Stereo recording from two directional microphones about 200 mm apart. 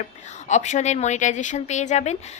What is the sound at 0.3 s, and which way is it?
A woman's voice, 35° left (ahead or behind).